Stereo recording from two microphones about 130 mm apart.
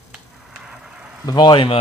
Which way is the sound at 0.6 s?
5° right (ahead or behind).